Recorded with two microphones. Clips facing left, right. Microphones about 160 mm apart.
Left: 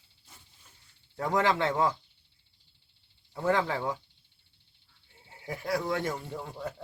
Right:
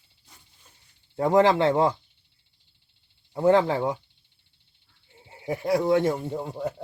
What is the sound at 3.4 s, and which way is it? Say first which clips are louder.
Speech: right 8 dB; 25° right (ahead or behind).